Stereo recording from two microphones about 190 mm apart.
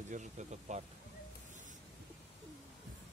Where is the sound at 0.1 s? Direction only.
40° right (ahead or behind).